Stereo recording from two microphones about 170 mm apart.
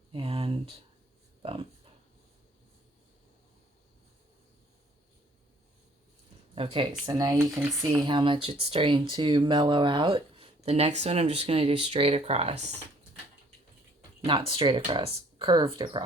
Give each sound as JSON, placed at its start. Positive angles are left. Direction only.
{"t": 0.1, "sound": "a sound", "side_deg": -30}
{"t": 7.0, "sound": "speech", "side_deg": -25}
{"t": 8.0, "sound": "speech", "side_deg": -30}
{"t": 14.3, "sound": "speech", "side_deg": -30}